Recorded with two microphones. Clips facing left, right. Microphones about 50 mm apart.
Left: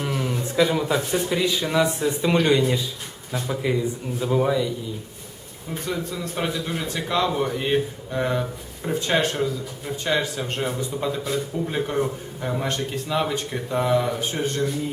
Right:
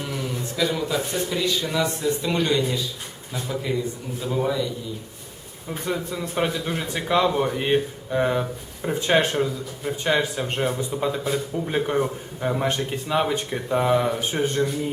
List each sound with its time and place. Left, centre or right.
0.1 s a man's voice: left
5.8 s a man's voice: centre